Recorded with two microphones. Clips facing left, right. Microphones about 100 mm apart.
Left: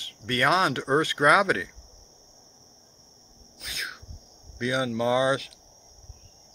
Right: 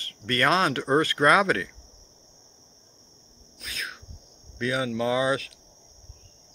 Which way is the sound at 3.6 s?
20° left (ahead or behind).